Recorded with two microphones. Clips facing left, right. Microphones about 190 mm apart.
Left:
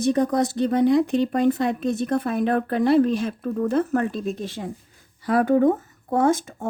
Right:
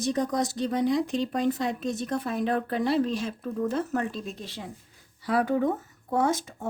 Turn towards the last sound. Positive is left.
turn(degrees=50)  # may be behind; listen again after turning